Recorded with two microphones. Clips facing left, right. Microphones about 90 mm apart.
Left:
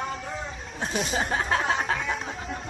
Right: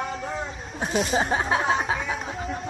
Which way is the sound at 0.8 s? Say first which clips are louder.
Right 4 dB; 15° right (ahead or behind).